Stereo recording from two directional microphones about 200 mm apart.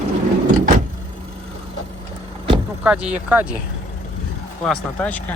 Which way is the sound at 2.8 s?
5° right (ahead or behind).